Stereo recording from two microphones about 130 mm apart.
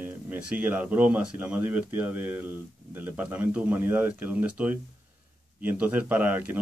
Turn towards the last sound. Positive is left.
turn(degrees=-15)  # may be behind; listen again after turning